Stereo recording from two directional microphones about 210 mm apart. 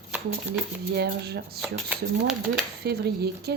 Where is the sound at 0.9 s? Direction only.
50° right (ahead or behind).